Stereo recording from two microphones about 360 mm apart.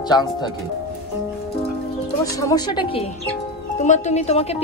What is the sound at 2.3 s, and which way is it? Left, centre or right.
Speech, centre.